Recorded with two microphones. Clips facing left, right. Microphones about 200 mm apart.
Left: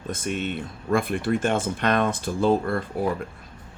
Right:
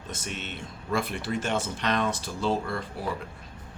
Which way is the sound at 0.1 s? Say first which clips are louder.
Left 9 dB; 55° left (ahead or behind).